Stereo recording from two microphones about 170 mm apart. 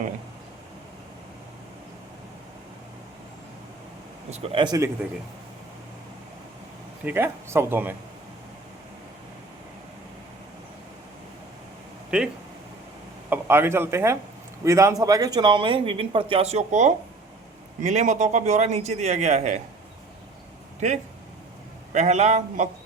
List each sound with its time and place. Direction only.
4.3 s speech: 40° right (ahead or behind)
7.0 s speech: 10° right (ahead or behind)
12.1 s speech: 5° right (ahead or behind)
13.3 s a man's voice: 15° right (ahead or behind); by 19.5 s 40° right (ahead or behind)
21.9 s speech: 40° right (ahead or behind)